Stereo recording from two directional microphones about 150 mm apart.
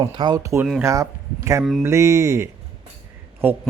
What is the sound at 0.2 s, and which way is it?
Speech, 25° right (ahead or behind).